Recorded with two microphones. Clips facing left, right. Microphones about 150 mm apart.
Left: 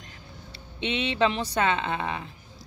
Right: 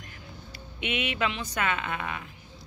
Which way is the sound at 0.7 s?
25° left (ahead or behind).